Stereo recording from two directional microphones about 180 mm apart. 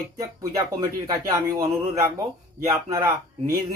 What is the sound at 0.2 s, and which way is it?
Speech, 20° right (ahead or behind).